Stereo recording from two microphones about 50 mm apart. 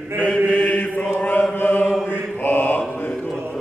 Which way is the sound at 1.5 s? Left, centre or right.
Left.